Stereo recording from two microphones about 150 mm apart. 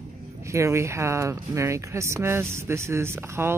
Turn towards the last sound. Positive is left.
turn(degrees=-15)  # may be behind; listen again after turning